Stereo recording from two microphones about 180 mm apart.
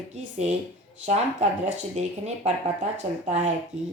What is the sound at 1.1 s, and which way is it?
Speech, 40° right (ahead or behind).